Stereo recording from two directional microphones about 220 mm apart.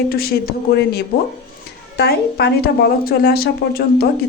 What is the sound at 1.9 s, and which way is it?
Speech, 45° left (ahead or behind).